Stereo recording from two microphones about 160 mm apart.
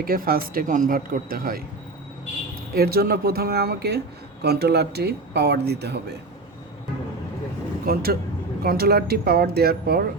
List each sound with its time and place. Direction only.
0.0 s speech: 70° right (ahead or behind)
2.7 s speech: 70° right (ahead or behind); by 6.0 s 90° right
7.9 s speech: 75° right (ahead or behind)